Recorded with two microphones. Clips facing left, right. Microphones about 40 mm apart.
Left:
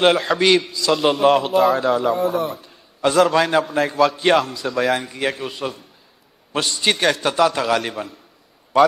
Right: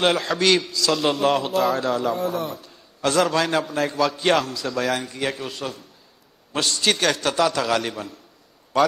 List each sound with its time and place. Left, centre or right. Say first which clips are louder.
0.0 s a man's voice: left 4 dB; centre
2.5 s a sound: left 2 dB; centre
3.2 s a man's voice: left 5 dB; centre